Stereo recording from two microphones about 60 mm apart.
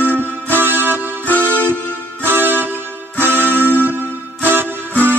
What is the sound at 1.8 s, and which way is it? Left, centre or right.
Music, left.